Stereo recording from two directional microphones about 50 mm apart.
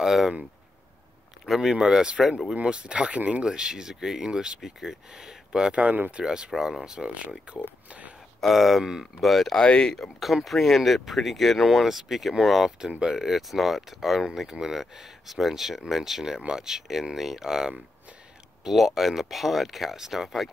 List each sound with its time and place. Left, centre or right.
0.0 s speech: centre
1.4 s speech: centre
8.4 s speech: centre
9.6 s speech: centre
10.2 s speech: centre